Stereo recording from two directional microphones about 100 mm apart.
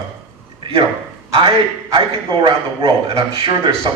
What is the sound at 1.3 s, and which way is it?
A man's voice, 60° right (ahead or behind).